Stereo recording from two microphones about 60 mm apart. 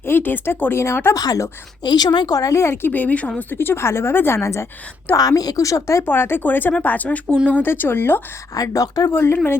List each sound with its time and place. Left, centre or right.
0.0 s speech: left
1.1 s speech: left
2.6 s speech: left
2.9 s speech: left
4.4 s speech: left
5.1 s speech: left
6.1 s speech: left
8.5 s speech: left
9.1 s speech: left